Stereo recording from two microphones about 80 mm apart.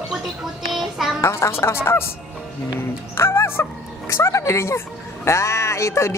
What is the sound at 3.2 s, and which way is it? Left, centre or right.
Chicken, left.